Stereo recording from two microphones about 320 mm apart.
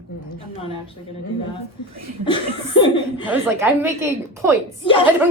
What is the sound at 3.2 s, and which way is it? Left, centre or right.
A woman's voice, centre.